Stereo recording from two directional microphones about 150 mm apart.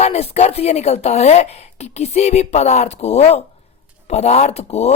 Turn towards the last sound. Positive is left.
turn(degrees=45)  # may be behind; listen again after turning